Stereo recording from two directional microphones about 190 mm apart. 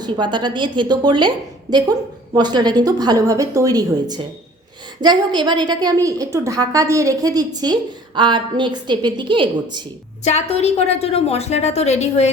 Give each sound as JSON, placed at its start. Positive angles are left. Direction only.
{"t": 0.0, "sound": "a woman's voice", "side_deg": -25}
{"t": 4.9, "sound": "a woman's voice", "side_deg": -20}
{"t": 10.2, "sound": "a woman's voice", "side_deg": 35}